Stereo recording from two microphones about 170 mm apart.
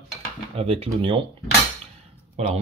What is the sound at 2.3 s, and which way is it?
Speech, 40° right (ahead or behind).